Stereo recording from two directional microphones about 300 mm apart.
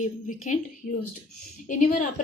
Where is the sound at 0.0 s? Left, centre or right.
Left.